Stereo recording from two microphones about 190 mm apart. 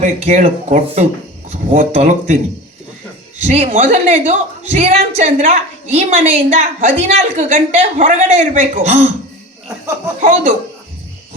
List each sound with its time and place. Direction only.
0.0 s a woman's voice: 40° right (ahead or behind)
3.4 s a woman's voice: 35° right (ahead or behind)
10.2 s a woman's voice: 40° right (ahead or behind)